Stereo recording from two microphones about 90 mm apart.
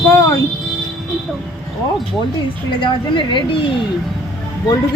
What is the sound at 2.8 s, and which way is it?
Speech, 65° left (ahead or behind).